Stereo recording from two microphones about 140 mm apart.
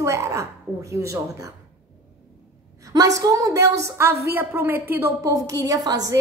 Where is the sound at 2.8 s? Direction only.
25° right (ahead or behind).